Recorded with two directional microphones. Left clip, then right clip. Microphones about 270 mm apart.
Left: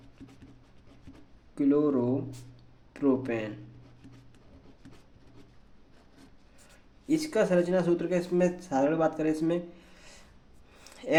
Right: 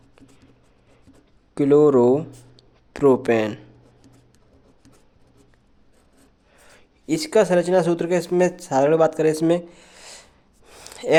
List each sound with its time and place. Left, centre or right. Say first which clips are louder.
1.5 s speech: right 11 dB; right
7.1 s speech: right 8 dB; right
10.7 s a sound: right 10 dB; right